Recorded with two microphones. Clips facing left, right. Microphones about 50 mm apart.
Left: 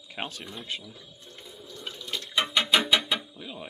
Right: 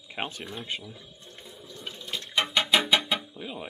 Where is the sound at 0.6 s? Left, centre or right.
Right.